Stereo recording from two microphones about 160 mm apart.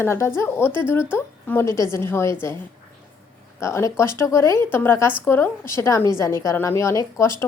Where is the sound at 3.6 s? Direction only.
20° left (ahead or behind).